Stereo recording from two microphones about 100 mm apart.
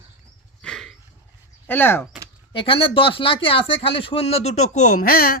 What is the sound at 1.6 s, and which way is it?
Speech, 20° left (ahead or behind).